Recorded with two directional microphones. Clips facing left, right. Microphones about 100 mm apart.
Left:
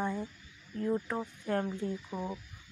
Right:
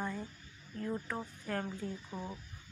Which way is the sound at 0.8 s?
15° left (ahead or behind).